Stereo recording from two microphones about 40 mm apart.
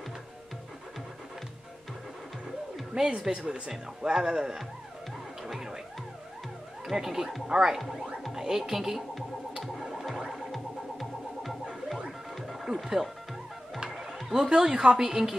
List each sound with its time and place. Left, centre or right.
2.9 s a woman's voice: right
3.7 s speech: centre
5.5 s music: centre
6.9 s speech: centre
7.8 s speech: centre
9.6 s music: centre
14.5 s a woman's voice: centre